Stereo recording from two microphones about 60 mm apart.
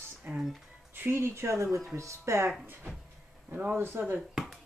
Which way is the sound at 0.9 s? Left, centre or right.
Right.